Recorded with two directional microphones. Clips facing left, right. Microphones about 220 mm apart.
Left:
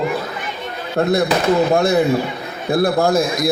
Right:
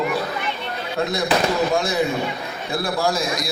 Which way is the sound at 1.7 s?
60° left (ahead or behind).